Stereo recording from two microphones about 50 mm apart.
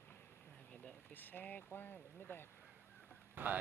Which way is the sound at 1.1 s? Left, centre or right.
Left.